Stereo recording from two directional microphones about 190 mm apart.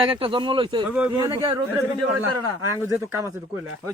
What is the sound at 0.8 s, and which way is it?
Speech, 5° right (ahead or behind).